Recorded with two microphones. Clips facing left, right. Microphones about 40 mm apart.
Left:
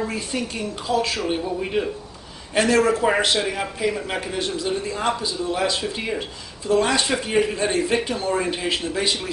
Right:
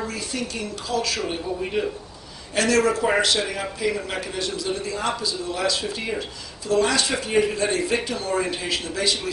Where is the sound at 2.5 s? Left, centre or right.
Left.